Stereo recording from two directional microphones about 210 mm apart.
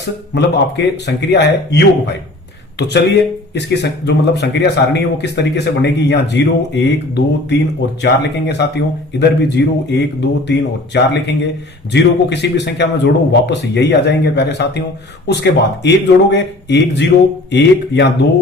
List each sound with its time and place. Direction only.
0.0 s speech: 55° left (ahead or behind)